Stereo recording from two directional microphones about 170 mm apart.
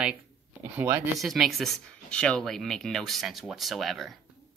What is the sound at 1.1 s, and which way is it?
Speech, centre (ahead or behind).